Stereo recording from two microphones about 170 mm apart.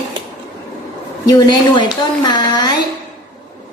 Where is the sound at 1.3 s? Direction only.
25° left (ahead or behind).